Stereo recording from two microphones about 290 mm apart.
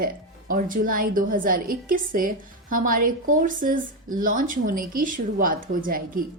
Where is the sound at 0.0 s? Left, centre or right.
Right.